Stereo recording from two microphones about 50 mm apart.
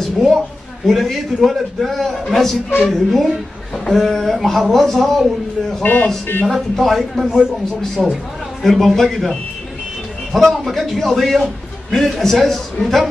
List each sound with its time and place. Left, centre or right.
0.0 s a sound: centre
0.8 s a man's voice: centre
5.9 s speech: left
6.4 s a man's voice: centre
7.2 s speech: centre
7.8 s a man's voice: centre